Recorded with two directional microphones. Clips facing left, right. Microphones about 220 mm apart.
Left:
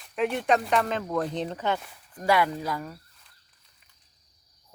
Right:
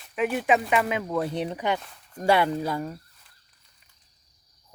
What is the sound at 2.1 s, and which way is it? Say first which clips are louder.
Speech: right 2 dB; 30° right (ahead or behind).